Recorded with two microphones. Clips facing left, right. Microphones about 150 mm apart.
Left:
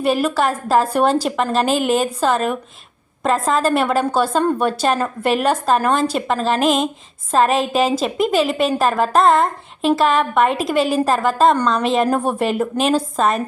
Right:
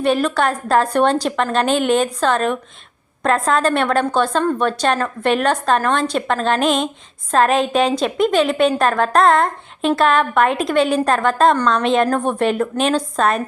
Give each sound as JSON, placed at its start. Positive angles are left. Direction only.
{"t": 0.0, "sound": "a woman's voice", "side_deg": 5}